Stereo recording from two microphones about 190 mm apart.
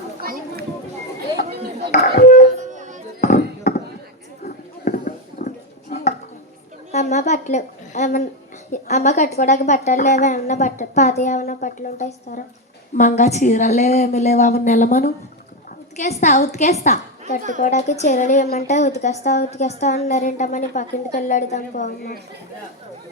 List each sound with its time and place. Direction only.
0.2 s children playing: 50° right (ahead or behind)
1.9 s speech: 50° left (ahead or behind)
2.6 s music: 40° right (ahead or behind)
3.2 s a sound: 40° left (ahead or behind)
5.0 s a sound: 40° left (ahead or behind)
8.7 s a woman's voice: 40° left (ahead or behind)